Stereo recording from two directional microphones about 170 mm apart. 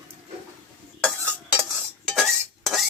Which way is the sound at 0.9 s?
5° left (ahead or behind).